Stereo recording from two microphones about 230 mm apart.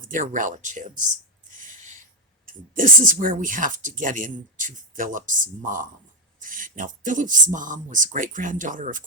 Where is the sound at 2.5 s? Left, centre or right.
Right.